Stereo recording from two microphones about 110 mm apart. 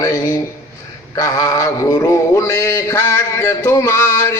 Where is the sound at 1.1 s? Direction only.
30° left (ahead or behind).